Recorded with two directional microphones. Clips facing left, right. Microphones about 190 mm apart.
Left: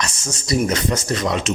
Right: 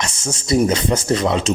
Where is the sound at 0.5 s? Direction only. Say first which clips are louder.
Right 3 dB; 25° right (ahead or behind).